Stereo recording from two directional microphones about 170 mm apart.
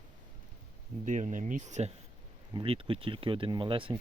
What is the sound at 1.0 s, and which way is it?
Speech, 45° right (ahead or behind).